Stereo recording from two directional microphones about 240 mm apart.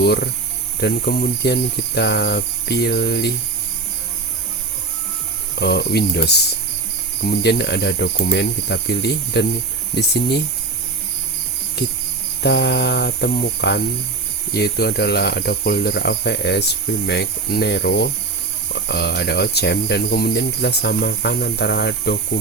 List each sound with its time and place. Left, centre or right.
0.0 s speech: left
5.5 s speech: left
12.4 s speech: left